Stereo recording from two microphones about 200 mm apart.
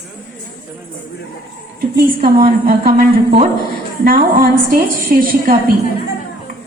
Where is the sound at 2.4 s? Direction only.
45° right (ahead or behind).